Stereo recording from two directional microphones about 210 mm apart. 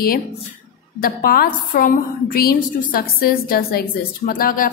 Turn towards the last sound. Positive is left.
turn(degrees=40)  # may be behind; listen again after turning